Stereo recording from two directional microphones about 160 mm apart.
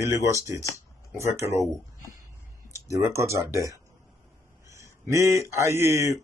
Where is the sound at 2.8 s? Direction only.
20° right (ahead or behind).